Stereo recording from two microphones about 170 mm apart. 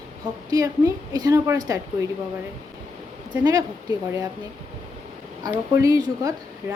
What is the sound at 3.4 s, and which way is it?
Speech, 20° right (ahead or behind).